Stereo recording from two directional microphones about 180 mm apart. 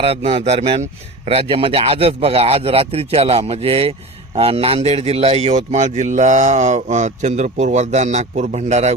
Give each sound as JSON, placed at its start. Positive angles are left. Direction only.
{"t": 0.0, "sound": "a man's voice", "side_deg": -30}